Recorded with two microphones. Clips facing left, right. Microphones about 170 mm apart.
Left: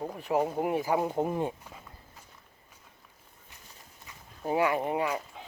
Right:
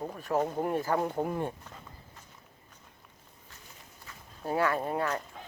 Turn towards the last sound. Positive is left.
turn(degrees=10)  # may be behind; listen again after turning